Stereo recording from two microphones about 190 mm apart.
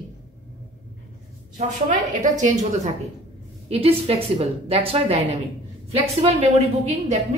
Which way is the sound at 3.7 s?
30° right (ahead or behind).